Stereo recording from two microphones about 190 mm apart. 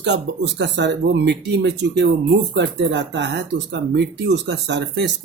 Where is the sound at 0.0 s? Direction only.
65° right (ahead or behind).